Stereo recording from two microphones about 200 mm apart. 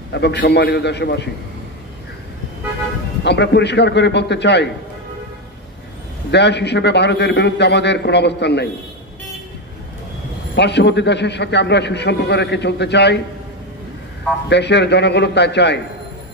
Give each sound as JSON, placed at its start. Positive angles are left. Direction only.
{"t": 0.1, "sound": "a man's voice", "side_deg": 60}
{"t": 3.3, "sound": "a man's voice", "side_deg": 60}
{"t": 6.3, "sound": "a man's voice", "side_deg": 60}
{"t": 10.5, "sound": "a man's voice", "side_deg": 60}
{"t": 14.5, "sound": "a man's voice", "side_deg": 60}